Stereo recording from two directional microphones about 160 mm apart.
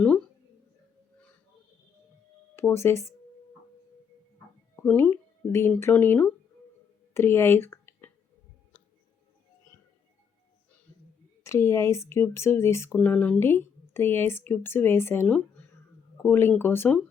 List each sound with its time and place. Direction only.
2.6 s speech: 15° left (ahead or behind)
4.8 s speech: 10° left (ahead or behind)
7.1 s a sound: 15° left (ahead or behind)
10.9 s clicking: 10° left (ahead or behind)
11.4 s speech: 15° left (ahead or behind)